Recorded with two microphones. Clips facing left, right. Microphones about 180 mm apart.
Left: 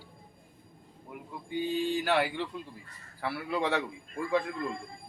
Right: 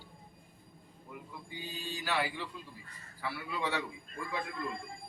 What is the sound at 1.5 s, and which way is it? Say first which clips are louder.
Mantra: left 14 dB; 65° left (ahead or behind).